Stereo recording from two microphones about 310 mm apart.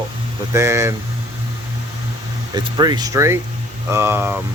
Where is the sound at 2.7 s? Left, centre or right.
Centre.